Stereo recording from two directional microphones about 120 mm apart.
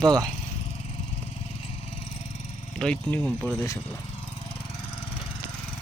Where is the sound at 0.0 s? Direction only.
35° right (ahead or behind).